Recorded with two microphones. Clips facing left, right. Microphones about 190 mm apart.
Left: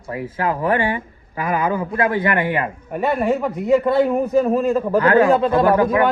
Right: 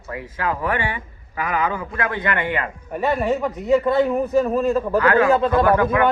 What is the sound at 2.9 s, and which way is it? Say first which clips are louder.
A man's voice: left 1 dB; 10° left (ahead or behind).